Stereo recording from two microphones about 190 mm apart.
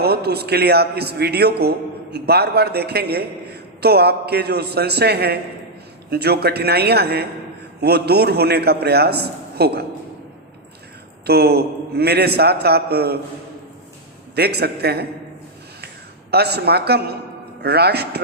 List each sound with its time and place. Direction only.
0.0 s a man's voice: 55° right (ahead or behind)
11.3 s a man's voice: 60° right (ahead or behind)
14.3 s a man's voice: 60° right (ahead or behind)
16.3 s a man's voice: 60° right (ahead or behind)